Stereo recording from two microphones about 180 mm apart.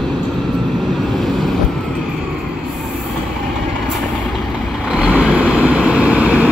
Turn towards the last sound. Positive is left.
turn(degrees=-5)  # may be behind; listen again after turning